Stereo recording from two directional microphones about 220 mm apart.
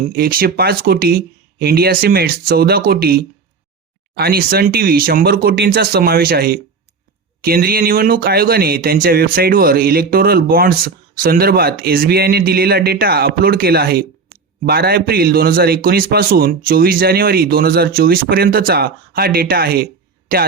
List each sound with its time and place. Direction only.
0.1 s speech: 40° right (ahead or behind)